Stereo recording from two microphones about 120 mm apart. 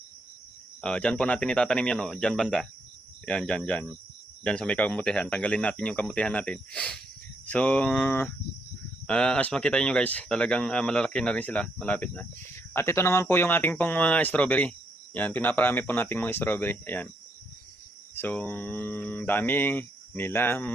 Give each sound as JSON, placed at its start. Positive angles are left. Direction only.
{"t": 0.8, "sound": "speech", "side_deg": 10}
{"t": 12.7, "sound": "speech", "side_deg": 25}
{"t": 18.1, "sound": "speech", "side_deg": 15}